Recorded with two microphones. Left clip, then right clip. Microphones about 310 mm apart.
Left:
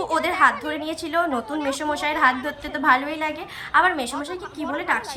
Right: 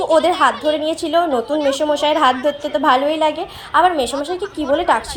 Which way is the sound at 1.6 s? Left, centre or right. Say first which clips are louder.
Right 8 dB; centre.